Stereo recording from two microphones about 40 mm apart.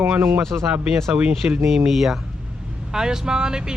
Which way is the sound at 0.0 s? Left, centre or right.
Right.